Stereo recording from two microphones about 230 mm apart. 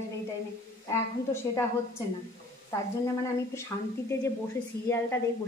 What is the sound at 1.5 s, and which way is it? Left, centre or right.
Speech, centre.